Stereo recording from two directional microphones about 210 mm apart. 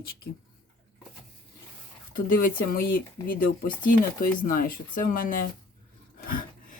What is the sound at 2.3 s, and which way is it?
Speech, 45° left (ahead or behind).